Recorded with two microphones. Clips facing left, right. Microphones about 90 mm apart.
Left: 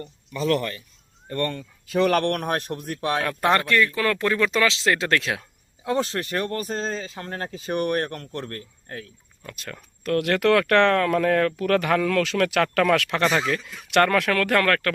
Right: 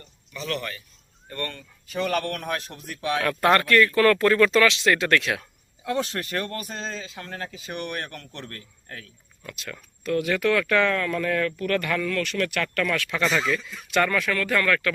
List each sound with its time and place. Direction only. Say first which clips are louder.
1.9 s speech: left 6 dB; 75° left (ahead or behind); by 3.2 s 45° left (ahead or behind)
3.2 s speech: right 3 dB; 20° left (ahead or behind)
4.6 s speech: right 1 dB; 30° left (ahead or behind)
10.0 s speech: left 2 dB; 60° left (ahead or behind); by 13.1 s 90° left
13.1 s speech: left 2 dB; 45° left (ahead or behind)
13.6 s speech: even; 5° left (ahead or behind)
13.9 s speech: left 4 dB; 65° left (ahead or behind)